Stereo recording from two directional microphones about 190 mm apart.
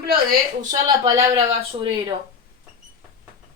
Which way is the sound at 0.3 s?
40° right (ahead or behind).